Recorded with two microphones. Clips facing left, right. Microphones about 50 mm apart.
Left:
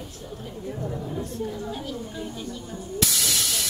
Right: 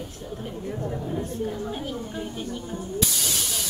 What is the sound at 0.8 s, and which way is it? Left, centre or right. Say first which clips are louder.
Speech: right 2 dB; centre.